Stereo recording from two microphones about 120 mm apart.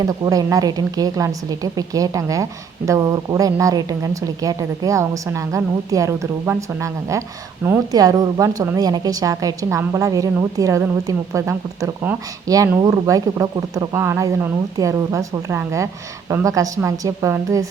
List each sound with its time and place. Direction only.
0.0 s a woman's voice: 30° right (ahead or behind)
7.9 s a woman's voice: 30° right (ahead or behind)